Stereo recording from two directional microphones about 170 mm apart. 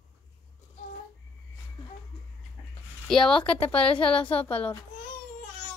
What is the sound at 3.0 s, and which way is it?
Speech, 5° left (ahead or behind).